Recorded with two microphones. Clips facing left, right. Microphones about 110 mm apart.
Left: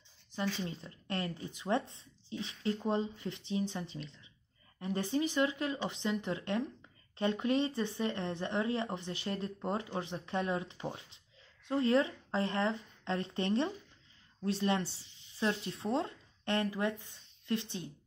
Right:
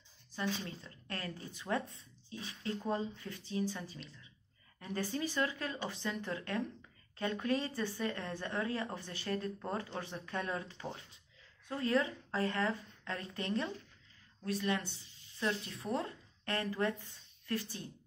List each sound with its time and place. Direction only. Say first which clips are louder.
0.7 s a woman's voice: left 4 dB; 25° left (ahead or behind)